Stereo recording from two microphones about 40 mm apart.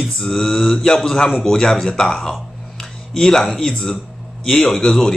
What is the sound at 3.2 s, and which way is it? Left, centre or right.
A man's voice, centre.